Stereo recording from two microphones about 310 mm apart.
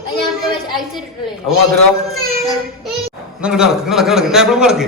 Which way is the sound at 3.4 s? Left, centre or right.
Centre.